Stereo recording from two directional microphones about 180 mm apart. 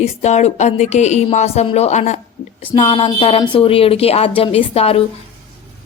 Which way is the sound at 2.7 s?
30° left (ahead or behind).